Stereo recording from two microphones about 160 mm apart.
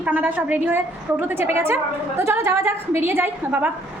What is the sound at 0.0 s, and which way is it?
A woman's voice, 10° right (ahead or behind).